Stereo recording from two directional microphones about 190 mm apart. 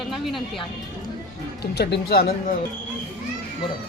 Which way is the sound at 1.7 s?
60° left (ahead or behind).